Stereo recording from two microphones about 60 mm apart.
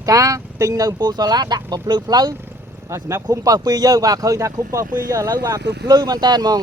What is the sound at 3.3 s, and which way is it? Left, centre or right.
Speech, right.